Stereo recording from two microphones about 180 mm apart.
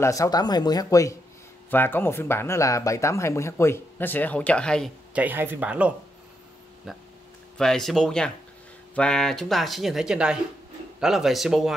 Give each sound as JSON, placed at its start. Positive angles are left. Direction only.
{"t": 0.0, "sound": "speech", "side_deg": 20}
{"t": 5.1, "sound": "speech", "side_deg": -10}
{"t": 7.5, "sound": "speech", "side_deg": 5}